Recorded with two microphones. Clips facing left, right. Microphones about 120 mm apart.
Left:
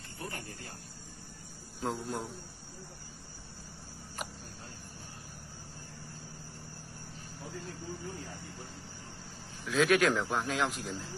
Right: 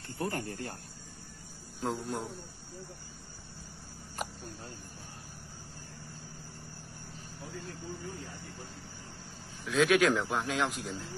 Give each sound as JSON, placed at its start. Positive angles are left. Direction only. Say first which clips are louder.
{"t": 0.2, "sound": "speech", "louder": "right 8 dB", "side_deg": -55}
{"t": 1.8, "sound": "a man's voice", "louder": "right 1 dB", "side_deg": 0}
{"t": 9.7, "sound": "a man's voice", "louder": "right 1 dB", "side_deg": 0}